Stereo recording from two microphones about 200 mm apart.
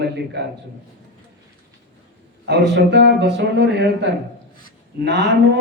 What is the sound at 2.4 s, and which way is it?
A man's voice, 55° right (ahead or behind).